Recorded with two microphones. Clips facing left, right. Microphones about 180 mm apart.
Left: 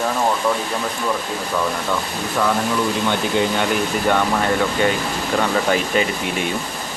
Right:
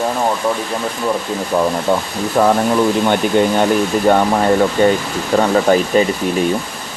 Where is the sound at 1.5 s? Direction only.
30° right (ahead or behind).